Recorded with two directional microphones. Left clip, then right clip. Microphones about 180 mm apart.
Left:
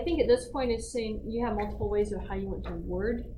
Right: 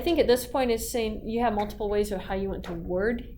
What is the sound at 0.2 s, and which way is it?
A woman's voice, 35° right (ahead or behind).